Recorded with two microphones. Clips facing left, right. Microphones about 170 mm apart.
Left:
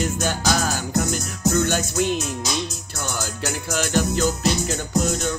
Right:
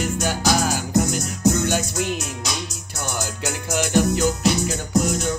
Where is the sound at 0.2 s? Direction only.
15° right (ahead or behind).